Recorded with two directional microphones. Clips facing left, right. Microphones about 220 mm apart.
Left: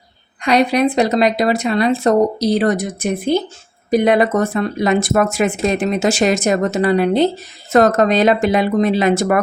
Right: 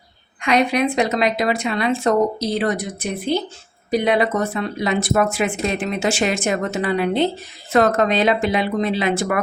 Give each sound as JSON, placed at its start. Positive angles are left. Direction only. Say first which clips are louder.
{"t": 0.4, "sound": "speech", "louder": "left 4 dB", "side_deg": 35}